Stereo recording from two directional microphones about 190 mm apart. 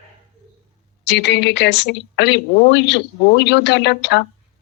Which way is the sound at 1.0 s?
65° left (ahead or behind).